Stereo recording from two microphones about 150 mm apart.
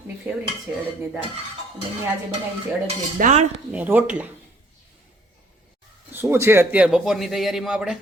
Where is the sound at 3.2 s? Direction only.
55° right (ahead or behind).